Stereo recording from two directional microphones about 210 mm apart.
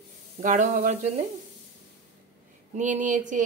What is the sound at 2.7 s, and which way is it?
Speech, 35° right (ahead or behind).